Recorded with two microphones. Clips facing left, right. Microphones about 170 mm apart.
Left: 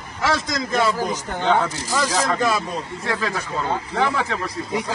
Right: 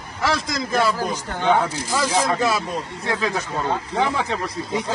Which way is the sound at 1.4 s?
15° right (ahead or behind).